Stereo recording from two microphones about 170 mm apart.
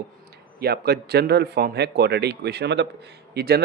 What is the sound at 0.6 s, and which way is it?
Speech, 70° right (ahead or behind).